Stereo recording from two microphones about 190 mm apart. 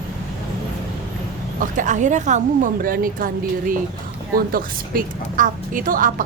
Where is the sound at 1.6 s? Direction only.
40° right (ahead or behind).